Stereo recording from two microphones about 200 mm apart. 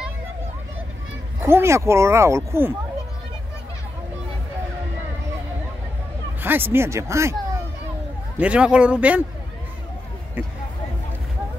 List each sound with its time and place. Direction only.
1.4 s speech: 10° right (ahead or behind)
6.4 s speech: 10° right (ahead or behind)
8.4 s speech: 5° right (ahead or behind)